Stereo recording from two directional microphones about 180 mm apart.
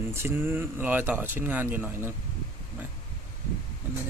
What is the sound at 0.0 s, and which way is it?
Speech, 15° right (ahead or behind).